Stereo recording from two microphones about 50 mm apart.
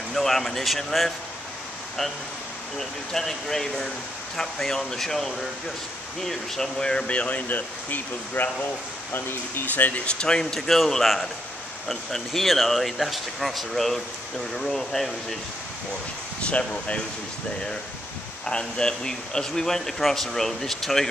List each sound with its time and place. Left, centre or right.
0.1 s speech: centre
2.8 s a man's voice: centre; by 10.0 s left
10.0 s a man's voice: centre
16.4 s speech: left
18.4 s a man's voice: centre